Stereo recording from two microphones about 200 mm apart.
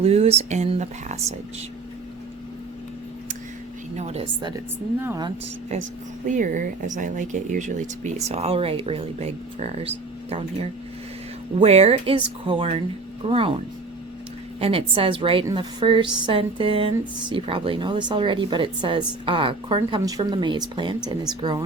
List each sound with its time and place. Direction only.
0.0 s speech: 30° right (ahead or behind)
3.9 s speech: 35° right (ahead or behind)
4.9 s speech: 10° right (ahead or behind)
6.2 s speech: 40° right (ahead or behind)
14.6 s speech: 25° right (ahead or behind)